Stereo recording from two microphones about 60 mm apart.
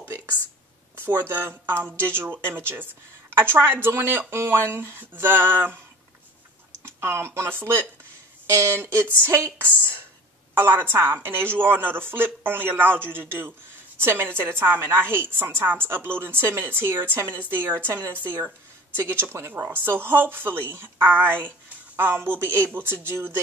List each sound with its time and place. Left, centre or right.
0.0 s a sound: right
1.3 s speech: right
6.8 s speech: right
8.5 s speech: right